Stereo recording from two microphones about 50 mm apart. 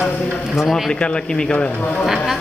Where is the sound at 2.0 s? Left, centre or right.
Centre.